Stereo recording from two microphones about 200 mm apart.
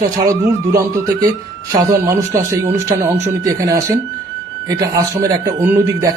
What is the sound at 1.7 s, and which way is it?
Speech, 15° right (ahead or behind).